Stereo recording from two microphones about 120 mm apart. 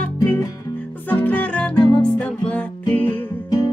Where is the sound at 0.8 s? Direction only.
15° left (ahead or behind).